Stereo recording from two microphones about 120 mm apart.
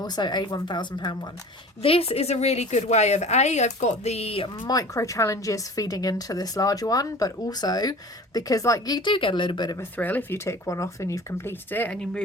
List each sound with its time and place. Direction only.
0.0 s speech: 35° left (ahead or behind)
1.8 s a woman's voice: 50° left (ahead or behind)
4.6 s speech: 30° left (ahead or behind)
10.0 s speech: 15° left (ahead or behind)